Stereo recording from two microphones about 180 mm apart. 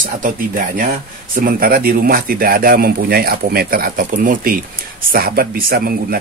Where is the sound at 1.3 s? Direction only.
55° right (ahead or behind).